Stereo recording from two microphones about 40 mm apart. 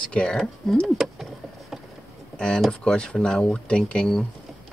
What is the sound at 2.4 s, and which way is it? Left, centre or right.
A man's voice, left.